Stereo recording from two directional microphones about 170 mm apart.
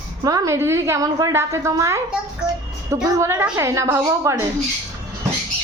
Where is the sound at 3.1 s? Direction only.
15° right (ahead or behind).